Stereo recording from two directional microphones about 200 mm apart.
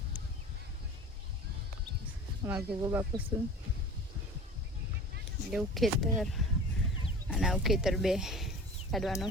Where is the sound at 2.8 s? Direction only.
15° right (ahead or behind).